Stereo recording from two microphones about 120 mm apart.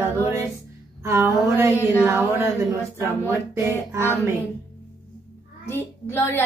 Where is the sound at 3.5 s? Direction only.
25° right (ahead or behind).